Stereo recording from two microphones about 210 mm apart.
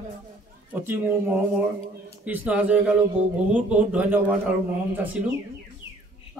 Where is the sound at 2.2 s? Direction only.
5° right (ahead or behind).